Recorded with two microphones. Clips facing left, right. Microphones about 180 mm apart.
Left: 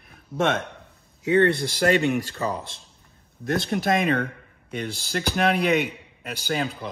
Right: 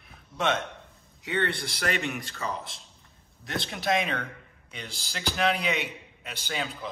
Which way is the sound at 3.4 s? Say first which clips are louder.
Left 9 dB; 50° left (ahead or behind).